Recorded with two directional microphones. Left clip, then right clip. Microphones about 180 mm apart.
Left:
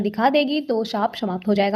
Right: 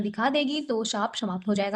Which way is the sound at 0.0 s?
35° left (ahead or behind).